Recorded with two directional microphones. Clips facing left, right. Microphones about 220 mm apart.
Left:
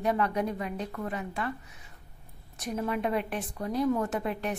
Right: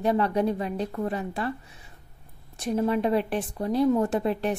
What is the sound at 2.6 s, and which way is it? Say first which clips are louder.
A woman's voice: right 6 dB; 30° right (ahead or behind).